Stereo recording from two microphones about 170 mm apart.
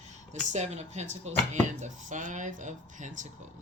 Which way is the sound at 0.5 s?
40° right (ahead or behind).